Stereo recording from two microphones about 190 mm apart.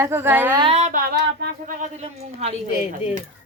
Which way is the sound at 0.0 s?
10° right (ahead or behind).